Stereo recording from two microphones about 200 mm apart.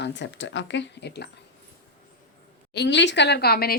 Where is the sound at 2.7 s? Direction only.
60° left (ahead or behind).